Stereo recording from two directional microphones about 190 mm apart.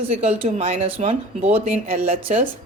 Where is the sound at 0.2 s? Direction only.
35° right (ahead or behind).